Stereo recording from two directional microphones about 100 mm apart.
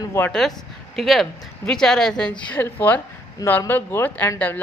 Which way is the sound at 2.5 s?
20° left (ahead or behind).